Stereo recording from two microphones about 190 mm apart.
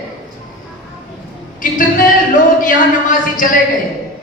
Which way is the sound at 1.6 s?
45° left (ahead or behind).